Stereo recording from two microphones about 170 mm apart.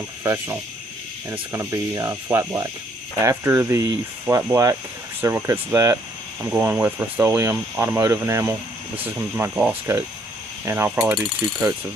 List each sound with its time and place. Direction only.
0.2 s speech: 15° right (ahead or behind)
10.9 s mechanisms: centre (ahead or behind)